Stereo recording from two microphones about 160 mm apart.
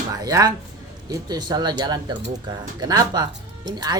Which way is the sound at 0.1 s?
20° right (ahead or behind).